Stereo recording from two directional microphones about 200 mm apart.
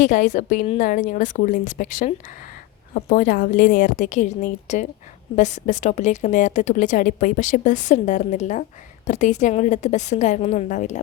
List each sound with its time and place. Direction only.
0.0 s a woman's voice: 40° left (ahead or behind)